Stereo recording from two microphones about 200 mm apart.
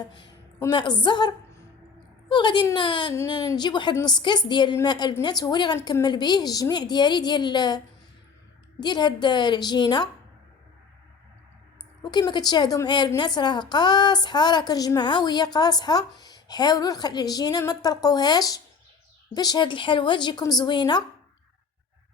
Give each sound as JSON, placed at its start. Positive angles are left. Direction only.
{"t": 0.6, "sound": "a woman's voice", "side_deg": 20}
{"t": 2.3, "sound": "a woman's voice", "side_deg": 25}
{"t": 8.8, "sound": "a woman's voice", "side_deg": 20}
{"t": 12.0, "sound": "a woman's voice", "side_deg": 20}